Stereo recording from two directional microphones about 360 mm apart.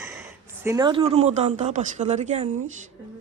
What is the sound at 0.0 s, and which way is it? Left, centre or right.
Speech, centre.